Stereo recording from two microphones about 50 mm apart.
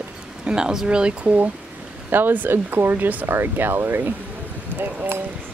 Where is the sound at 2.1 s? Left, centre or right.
Right.